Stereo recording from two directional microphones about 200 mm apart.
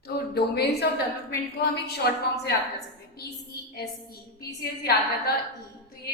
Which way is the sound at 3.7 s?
50° left (ahead or behind).